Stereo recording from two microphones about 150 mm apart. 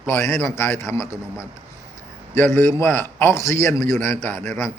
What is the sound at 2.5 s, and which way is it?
A man's voice, 15° left (ahead or behind).